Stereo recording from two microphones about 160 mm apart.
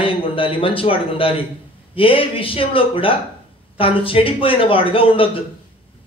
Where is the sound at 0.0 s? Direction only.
35° left (ahead or behind).